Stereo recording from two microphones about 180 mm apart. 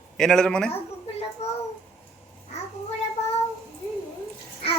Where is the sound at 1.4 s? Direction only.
35° left (ahead or behind).